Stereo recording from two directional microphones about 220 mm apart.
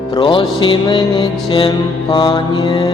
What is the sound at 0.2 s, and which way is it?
Mantra, 25° left (ahead or behind).